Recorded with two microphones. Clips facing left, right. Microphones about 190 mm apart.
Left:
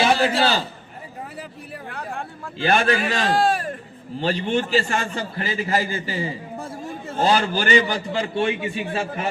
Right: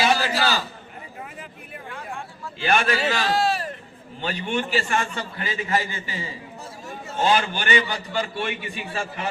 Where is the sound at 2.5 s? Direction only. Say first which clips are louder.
Left 2 dB; 35° left (ahead or behind).